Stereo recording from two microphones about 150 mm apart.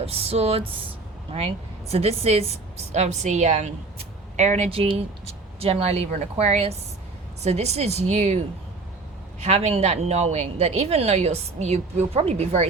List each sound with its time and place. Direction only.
0.0 s music: 40° right (ahead or behind)
1.3 s speech: 45° right (ahead or behind)
9.4 s speech: 45° right (ahead or behind)